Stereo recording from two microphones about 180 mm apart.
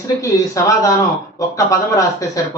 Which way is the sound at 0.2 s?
20° left (ahead or behind).